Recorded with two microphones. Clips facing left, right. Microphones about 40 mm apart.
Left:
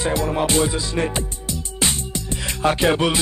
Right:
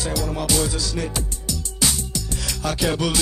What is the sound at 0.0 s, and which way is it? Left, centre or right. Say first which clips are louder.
Music: left 5 dB; left.